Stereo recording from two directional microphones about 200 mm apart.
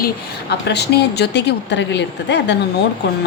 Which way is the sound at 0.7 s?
55° left (ahead or behind).